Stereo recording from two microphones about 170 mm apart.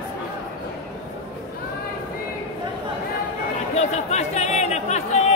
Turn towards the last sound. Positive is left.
turn(degrees=40)  # may be behind; listen again after turning